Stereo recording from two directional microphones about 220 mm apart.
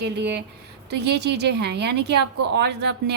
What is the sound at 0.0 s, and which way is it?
Speech, 50° right (ahead or behind).